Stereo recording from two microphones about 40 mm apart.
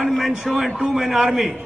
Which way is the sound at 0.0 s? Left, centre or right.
Centre.